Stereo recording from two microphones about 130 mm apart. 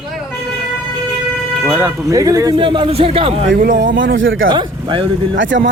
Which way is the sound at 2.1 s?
25° right (ahead or behind).